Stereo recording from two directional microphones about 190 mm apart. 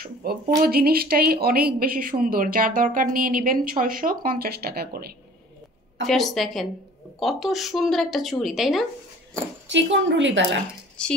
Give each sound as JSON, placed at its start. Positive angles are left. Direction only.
{"t": 0.0, "sound": "speech", "side_deg": -55}
{"t": 6.0, "sound": "speech", "side_deg": 0}
{"t": 9.7, "sound": "a woman's voice", "side_deg": -75}
{"t": 11.0, "sound": "speech", "side_deg": 5}